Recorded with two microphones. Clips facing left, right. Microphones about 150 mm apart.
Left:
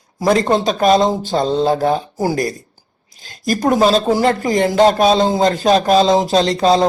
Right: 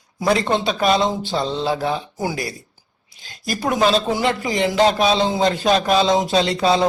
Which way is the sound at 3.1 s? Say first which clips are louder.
Left 7 dB; 45° left (ahead or behind).